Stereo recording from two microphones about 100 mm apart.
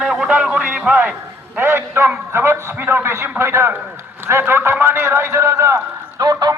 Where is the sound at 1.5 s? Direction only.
25° right (ahead or behind).